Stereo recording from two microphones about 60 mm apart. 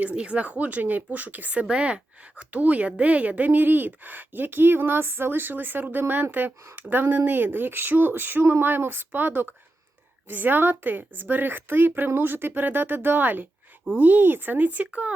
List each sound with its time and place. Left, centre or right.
0.0 s a woman's voice: centre